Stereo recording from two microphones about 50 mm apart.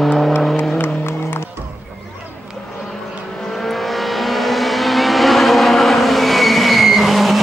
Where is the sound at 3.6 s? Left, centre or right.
Centre.